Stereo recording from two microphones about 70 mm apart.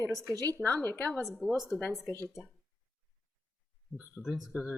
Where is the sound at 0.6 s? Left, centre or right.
Left.